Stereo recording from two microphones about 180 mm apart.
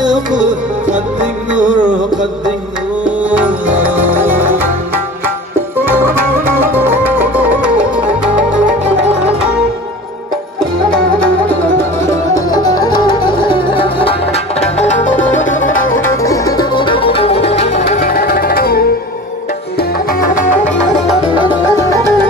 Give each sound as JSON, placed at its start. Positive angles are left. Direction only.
{"t": 0.1, "sound": "music", "side_deg": -45}
{"t": 3.3, "sound": "music", "side_deg": -10}
{"t": 6.6, "sound": "music", "side_deg": -10}
{"t": 11.4, "sound": "music", "side_deg": 15}
{"t": 15.9, "sound": "music", "side_deg": 15}
{"t": 18.0, "sound": "music", "side_deg": 55}
{"t": 21.5, "sound": "music", "side_deg": 20}